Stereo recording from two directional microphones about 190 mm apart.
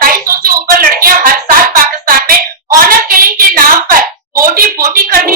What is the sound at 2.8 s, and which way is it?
A woman's voice, 50° right (ahead or behind).